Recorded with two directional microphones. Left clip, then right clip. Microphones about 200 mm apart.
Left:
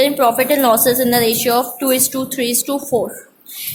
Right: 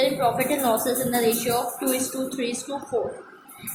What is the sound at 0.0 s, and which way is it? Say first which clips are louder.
A woman's voice: left 8 dB; 50° left (ahead or behind).